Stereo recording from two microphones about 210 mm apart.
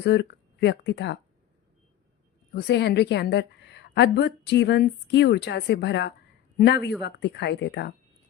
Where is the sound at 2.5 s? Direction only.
55° left (ahead or behind).